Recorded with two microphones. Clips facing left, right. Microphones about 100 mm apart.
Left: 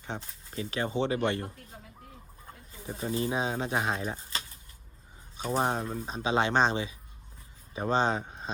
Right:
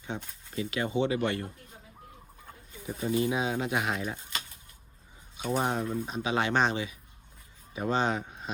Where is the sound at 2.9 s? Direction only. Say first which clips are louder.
Right 3 dB; 35° left (ahead or behind).